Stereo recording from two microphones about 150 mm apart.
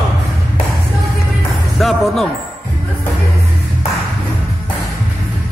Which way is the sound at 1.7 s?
Centre (ahead or behind).